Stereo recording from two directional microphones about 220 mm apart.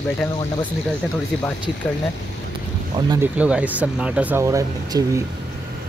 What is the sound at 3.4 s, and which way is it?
Speech, 5° right (ahead or behind).